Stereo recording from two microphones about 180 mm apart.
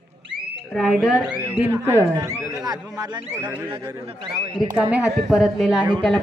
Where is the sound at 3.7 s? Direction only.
25° right (ahead or behind).